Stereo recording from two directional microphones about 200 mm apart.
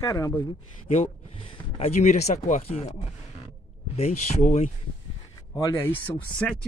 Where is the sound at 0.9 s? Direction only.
30° left (ahead or behind).